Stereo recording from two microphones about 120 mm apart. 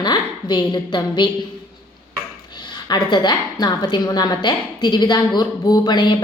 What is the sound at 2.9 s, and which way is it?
A woman's voice, 35° left (ahead or behind).